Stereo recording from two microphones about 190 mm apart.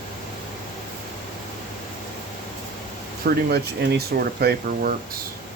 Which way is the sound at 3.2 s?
55° right (ahead or behind).